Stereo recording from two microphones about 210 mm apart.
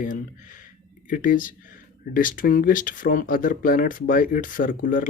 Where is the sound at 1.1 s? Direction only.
40° left (ahead or behind).